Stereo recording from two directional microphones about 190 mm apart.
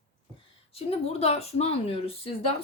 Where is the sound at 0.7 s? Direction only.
30° left (ahead or behind).